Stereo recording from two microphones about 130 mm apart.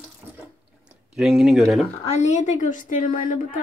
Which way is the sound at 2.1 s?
65° left (ahead or behind).